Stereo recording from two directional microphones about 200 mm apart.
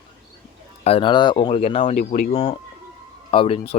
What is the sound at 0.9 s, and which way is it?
Speech, 25° left (ahead or behind).